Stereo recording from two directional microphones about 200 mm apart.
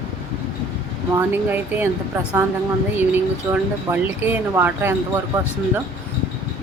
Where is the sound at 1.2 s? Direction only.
10° right (ahead or behind).